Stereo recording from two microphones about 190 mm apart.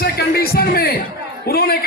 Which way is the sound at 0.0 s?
55° left (ahead or behind).